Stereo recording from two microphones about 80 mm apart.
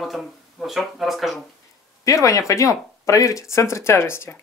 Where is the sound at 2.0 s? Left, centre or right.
Left.